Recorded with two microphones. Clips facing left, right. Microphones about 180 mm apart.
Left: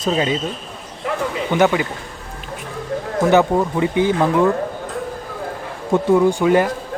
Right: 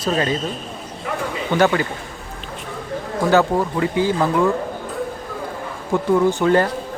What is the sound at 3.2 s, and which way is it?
Speech, 20° left (ahead or behind).